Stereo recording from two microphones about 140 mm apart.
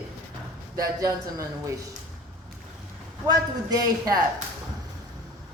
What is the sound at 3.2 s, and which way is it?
Speech, 25° right (ahead or behind).